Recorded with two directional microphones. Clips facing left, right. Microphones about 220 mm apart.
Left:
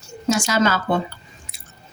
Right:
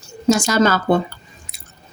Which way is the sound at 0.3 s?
40° right (ahead or behind).